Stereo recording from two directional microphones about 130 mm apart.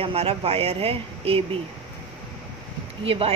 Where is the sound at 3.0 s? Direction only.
45° right (ahead or behind).